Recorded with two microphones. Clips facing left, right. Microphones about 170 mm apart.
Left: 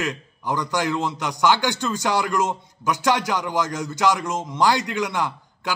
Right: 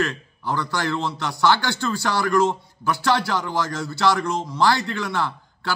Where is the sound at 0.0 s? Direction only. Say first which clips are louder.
Right 2 dB; 15° left (ahead or behind).